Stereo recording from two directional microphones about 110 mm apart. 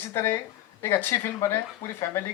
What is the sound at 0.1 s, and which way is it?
A man's voice, 25° left (ahead or behind).